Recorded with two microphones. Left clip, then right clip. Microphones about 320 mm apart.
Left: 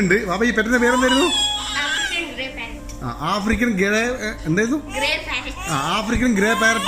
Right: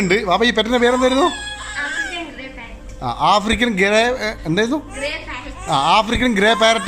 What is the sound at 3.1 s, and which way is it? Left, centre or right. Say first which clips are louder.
A man's voice: right 7 dB; centre.